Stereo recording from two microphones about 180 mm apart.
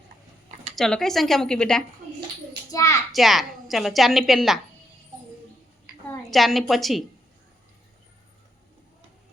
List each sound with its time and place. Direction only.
0.8 s speech: 5° left (ahead or behind)
2.7 s a child's voice: 15° left (ahead or behind)
3.1 s speech: centre (ahead or behind)
6.3 s speech: centre (ahead or behind)